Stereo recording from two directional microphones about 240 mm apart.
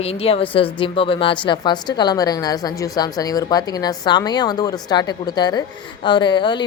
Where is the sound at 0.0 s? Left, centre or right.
Left.